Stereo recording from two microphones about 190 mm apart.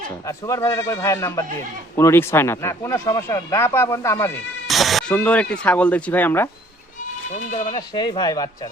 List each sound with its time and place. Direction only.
0.3 s speech: 15° left (ahead or behind)
4.7 s speech: centre (ahead or behind)
7.3 s speech: 40° left (ahead or behind)
7.8 s speech: 20° left (ahead or behind)